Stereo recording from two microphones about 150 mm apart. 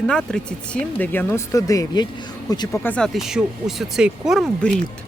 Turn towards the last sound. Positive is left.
turn(degrees=0)  # may be behind; listen again after turning